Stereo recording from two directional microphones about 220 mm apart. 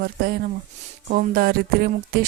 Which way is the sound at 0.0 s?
45° right (ahead or behind).